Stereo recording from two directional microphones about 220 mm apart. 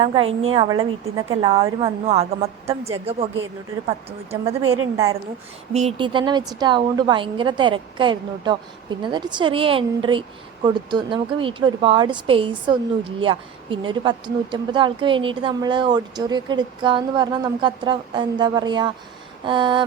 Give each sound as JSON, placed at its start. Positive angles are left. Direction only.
{"t": 0.0, "sound": "a woman's voice", "side_deg": -25}
{"t": 5.7, "sound": "a woman's voice", "side_deg": -25}